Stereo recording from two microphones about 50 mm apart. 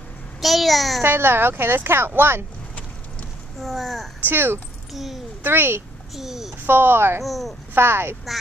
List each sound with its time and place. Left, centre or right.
0.4 s babbling: centre
1.0 s a woman's voice: right
3.6 s a child's voice: centre
4.3 s a woman's voice: right
4.9 s a child's voice: centre
5.4 s a woman's voice: right
6.1 s a child's voice: centre
6.6 s a woman's voice: right
7.2 s a child's voice: centre
7.7 s a woman's voice: right